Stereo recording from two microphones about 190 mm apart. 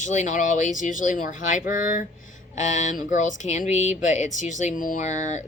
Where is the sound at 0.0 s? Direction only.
40° left (ahead or behind).